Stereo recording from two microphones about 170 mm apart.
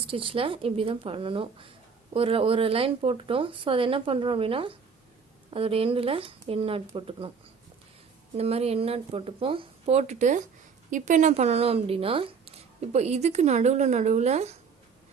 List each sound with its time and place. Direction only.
0.1 s speech: 30° right (ahead or behind)
8.4 s speech: 35° right (ahead or behind)